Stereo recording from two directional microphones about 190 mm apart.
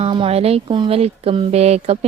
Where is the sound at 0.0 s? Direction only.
30° right (ahead or behind).